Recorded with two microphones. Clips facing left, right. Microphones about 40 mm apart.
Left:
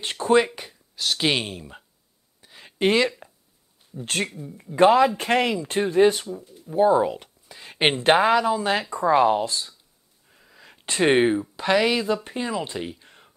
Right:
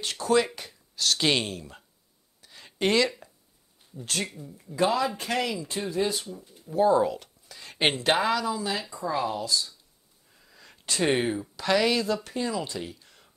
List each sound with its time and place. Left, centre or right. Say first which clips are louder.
0.0 s speech: left 4 dB; left
0.5 s speech: left 3 dB; centre
2.4 s a sound: left 4 dB; centre
3.9 s speech: left 5 dB; left
6.3 s speech: left 3 dB; left
8.0 s speech: left 10 dB; left
10.3 s wheeze: left 3 dB; centre
10.9 s speech: left 6 dB; left